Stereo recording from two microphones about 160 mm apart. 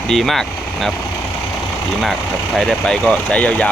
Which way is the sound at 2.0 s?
Centre (ahead or behind).